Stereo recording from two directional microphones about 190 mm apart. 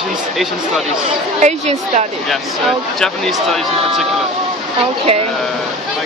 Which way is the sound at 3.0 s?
Centre (ahead or behind).